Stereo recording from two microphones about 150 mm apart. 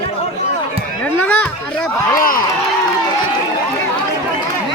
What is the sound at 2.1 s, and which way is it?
Speech, 70° left (ahead or behind).